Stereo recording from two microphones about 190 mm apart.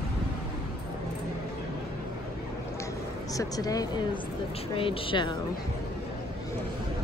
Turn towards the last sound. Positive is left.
turn(degrees=25)  # may be behind; listen again after turning